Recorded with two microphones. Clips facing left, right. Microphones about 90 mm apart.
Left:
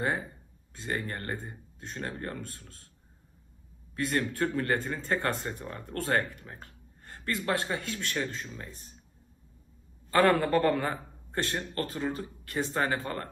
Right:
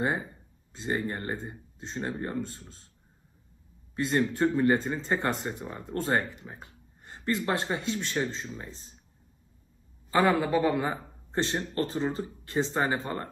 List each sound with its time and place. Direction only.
0.7 s speech: 20° right (ahead or behind)
3.9 s speech: 20° right (ahead or behind)
10.1 s speech: 15° right (ahead or behind)